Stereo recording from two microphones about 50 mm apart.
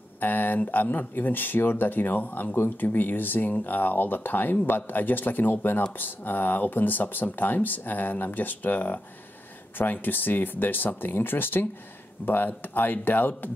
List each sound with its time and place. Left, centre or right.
0.2 s speech: left